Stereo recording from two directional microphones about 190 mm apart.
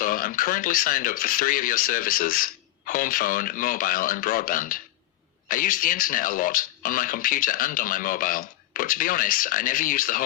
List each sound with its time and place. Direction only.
0.0 s speech: 45° left (ahead or behind)